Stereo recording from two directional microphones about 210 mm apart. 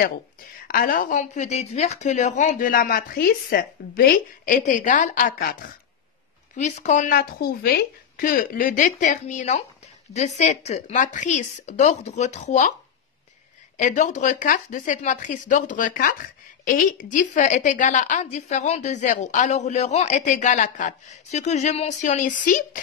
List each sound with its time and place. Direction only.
0.7 s a woman's voice: 45° left (ahead or behind)
13.7 s a woman's voice: 35° left (ahead or behind)